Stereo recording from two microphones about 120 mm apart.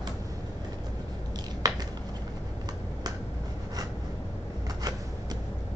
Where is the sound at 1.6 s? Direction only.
30° right (ahead or behind).